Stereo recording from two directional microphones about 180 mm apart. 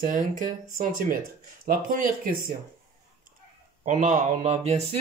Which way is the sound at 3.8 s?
45° right (ahead or behind).